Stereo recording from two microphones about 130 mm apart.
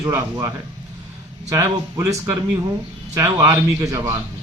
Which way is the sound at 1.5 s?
25° right (ahead or behind).